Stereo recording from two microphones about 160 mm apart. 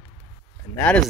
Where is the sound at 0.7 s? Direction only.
10° left (ahead or behind).